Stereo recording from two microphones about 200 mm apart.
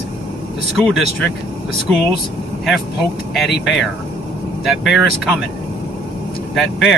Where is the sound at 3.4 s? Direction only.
55° left (ahead or behind).